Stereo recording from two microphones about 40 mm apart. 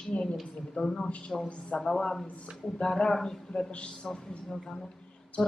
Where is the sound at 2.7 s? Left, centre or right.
Left.